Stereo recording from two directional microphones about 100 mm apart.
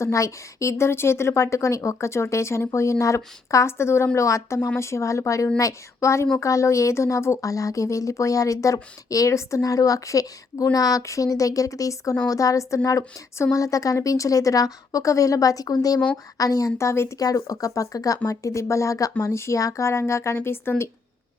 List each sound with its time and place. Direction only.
0.0 s a woman's voice: 30° left (ahead or behind)